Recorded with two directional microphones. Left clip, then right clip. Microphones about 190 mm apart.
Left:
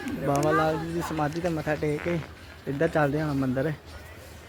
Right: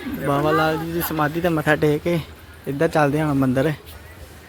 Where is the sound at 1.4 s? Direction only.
25° right (ahead or behind).